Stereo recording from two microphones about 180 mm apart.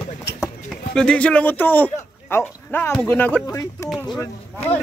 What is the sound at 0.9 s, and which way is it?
A man's voice, 5° left (ahead or behind).